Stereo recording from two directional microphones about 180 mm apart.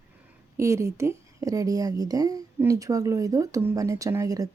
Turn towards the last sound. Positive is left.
turn(degrees=-20)  # may be behind; listen again after turning